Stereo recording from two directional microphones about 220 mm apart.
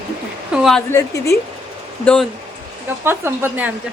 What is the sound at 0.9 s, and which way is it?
A woman's voice, 15° left (ahead or behind).